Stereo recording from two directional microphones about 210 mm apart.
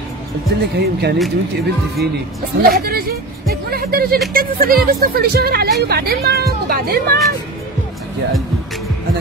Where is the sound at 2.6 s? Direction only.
45° right (ahead or behind).